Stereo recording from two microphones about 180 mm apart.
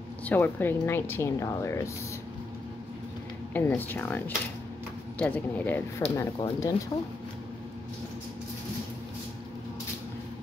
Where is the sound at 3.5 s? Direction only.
10° left (ahead or behind).